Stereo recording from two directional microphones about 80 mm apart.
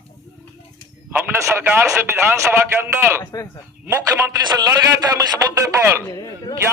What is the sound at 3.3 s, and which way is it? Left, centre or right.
Speech, left.